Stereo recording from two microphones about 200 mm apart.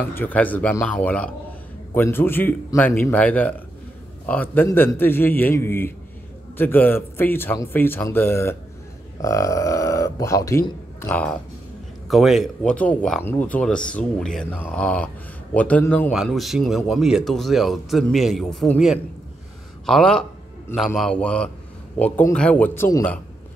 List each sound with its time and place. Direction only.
0.1 s a man's voice: 10° left (ahead or behind)